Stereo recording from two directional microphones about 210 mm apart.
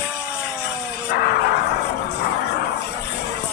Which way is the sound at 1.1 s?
50° left (ahead or behind).